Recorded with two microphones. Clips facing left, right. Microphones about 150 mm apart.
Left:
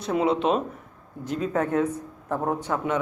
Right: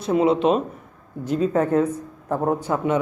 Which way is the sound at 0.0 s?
Centre (ahead or behind).